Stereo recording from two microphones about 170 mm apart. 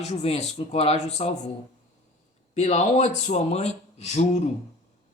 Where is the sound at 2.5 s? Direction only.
40° left (ahead or behind).